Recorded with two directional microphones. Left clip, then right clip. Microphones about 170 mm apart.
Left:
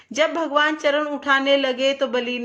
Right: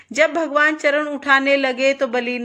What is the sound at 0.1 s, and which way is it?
A woman's voice, 25° right (ahead or behind).